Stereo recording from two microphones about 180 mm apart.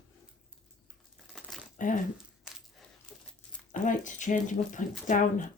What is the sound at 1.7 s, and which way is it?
Speech, 45° left (ahead or behind).